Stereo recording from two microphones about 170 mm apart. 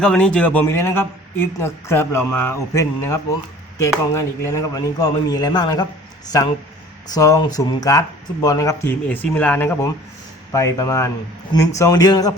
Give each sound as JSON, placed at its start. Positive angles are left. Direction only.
{"t": 0.0, "sound": "a man's voice", "side_deg": 5}